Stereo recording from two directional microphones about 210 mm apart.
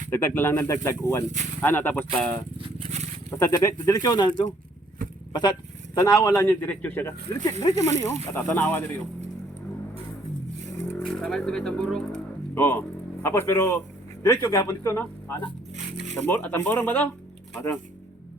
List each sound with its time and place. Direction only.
0.1 s a man's voice: 10° left (ahead or behind)
2.6 s a sound: 25° right (ahead or behind)
3.2 s a man's voice: 15° left (ahead or behind)
10.8 s a man's voice: centre (ahead or behind)